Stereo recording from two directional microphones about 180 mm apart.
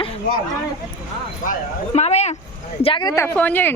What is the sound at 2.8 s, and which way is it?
Speech, 25° left (ahead or behind).